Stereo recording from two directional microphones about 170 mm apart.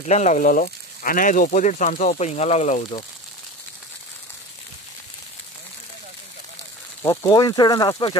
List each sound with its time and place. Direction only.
0.0 s speech: 45° left (ahead or behind)
7.0 s speech: 25° left (ahead or behind)